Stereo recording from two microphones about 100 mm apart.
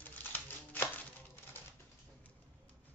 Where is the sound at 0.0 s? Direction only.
20° left (ahead or behind).